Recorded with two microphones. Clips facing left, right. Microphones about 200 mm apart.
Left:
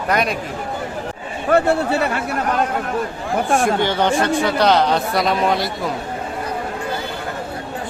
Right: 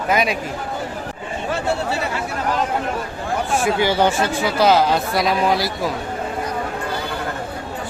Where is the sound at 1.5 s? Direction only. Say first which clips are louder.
Left 7 dB; 60° left (ahead or behind).